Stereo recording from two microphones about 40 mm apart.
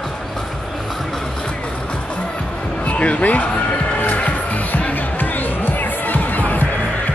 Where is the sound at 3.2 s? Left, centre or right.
Left.